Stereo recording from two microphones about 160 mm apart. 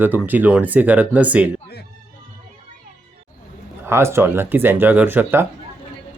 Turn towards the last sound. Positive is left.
turn(degrees=-15)  # may be behind; listen again after turning